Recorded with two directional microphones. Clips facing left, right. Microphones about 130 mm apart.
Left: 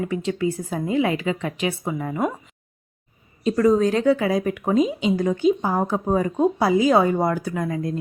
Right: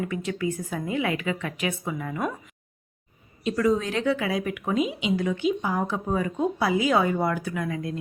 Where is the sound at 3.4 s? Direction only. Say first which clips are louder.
Left 6 dB; 40° left (ahead or behind).